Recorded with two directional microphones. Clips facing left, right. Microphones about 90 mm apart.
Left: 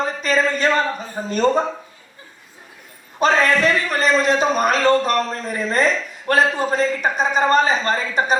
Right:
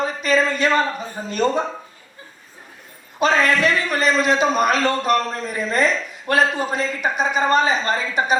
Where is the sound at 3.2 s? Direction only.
40° left (ahead or behind).